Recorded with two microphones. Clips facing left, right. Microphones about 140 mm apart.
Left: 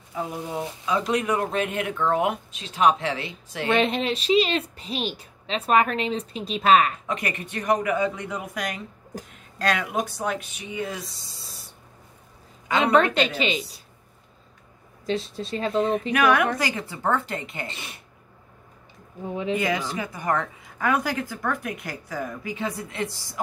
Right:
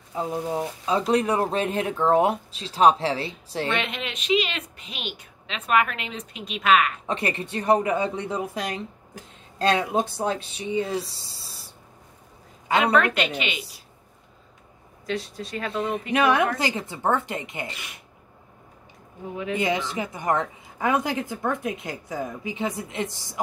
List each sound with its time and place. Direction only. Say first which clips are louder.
0.1 s speech: right 3 dB; 25° right (ahead or behind)
3.7 s a woman's voice: left 7 dB; 35° left (ahead or behind)
7.1 s a woman's voice: right 2 dB; 30° right (ahead or behind)
12.7 s a woman's voice: left 1 dB; 30° left (ahead or behind)
15.0 s speech: left 3 dB; 25° left (ahead or behind)
16.1 s a woman's voice: right 3 dB; 25° right (ahead or behind)
17.6 s speech: left 1 dB; 30° left (ahead or behind)
19.5 s a woman's voice: right 1 dB; 25° right (ahead or behind)